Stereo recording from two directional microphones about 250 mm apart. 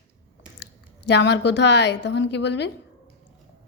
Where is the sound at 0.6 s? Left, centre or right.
Left.